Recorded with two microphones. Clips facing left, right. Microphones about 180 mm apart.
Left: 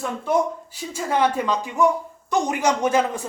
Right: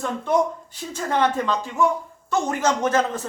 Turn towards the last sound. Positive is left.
turn(degrees=10)  # may be behind; listen again after turning